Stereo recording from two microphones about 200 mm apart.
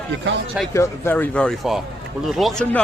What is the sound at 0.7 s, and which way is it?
Speech, 15° left (ahead or behind).